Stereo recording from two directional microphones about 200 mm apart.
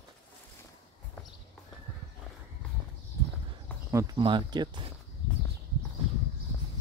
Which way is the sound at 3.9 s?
15° right (ahead or behind).